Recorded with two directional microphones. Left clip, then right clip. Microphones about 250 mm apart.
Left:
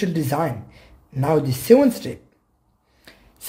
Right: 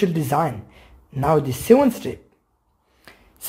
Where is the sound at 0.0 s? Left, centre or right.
Centre.